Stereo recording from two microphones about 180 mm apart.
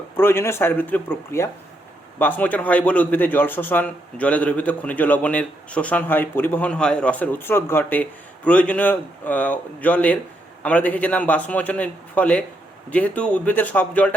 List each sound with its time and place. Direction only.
0.2 s a man's voice: 10° left (ahead or behind)